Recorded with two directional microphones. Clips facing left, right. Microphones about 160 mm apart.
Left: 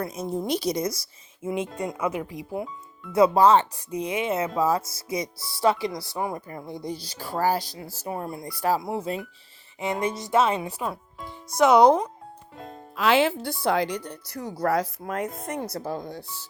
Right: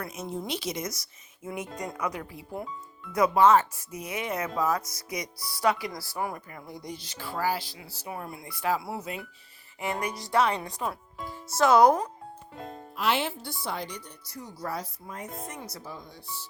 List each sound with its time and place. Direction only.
0.0 s speech: 35° left (ahead or behind); by 3.1 s 10° left (ahead or behind)
3.1 s speech: 30° left (ahead or behind); by 8.1 s 45° left (ahead or behind)
8.1 s speech: 30° left (ahead or behind)
10.6 s speech: 10° left (ahead or behind)
10.8 s speech: centre (ahead or behind)
11.5 s speech: 20° left (ahead or behind)
13.1 s speech: 90° left
15.4 s speech: 55° left (ahead or behind); by 16.5 s 80° left